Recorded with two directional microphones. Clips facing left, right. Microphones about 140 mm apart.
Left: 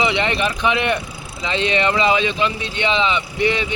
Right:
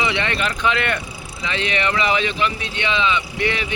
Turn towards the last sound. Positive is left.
turn(degrees=20)  # may be behind; listen again after turning